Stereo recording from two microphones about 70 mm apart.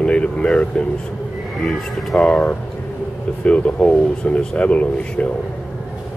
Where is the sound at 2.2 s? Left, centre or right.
Centre.